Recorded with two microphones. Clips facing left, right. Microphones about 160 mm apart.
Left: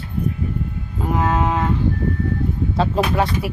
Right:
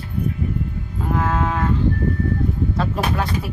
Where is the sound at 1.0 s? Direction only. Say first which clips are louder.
Left 2 dB; 20° left (ahead or behind).